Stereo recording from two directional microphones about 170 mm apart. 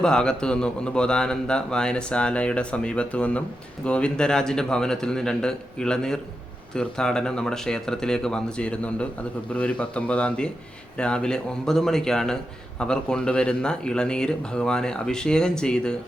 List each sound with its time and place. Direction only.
0.0 s a man's voice: 5° left (ahead or behind)